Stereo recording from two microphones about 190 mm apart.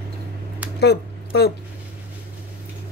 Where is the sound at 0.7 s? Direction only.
60° left (ahead or behind).